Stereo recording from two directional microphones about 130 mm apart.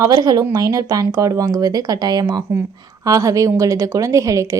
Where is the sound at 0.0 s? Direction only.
30° right (ahead or behind).